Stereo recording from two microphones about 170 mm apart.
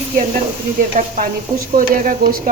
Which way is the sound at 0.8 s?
50° right (ahead or behind).